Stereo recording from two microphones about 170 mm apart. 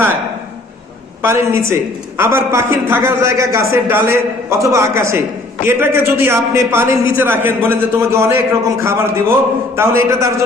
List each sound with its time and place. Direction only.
1.2 s a man's voice: 15° right (ahead or behind)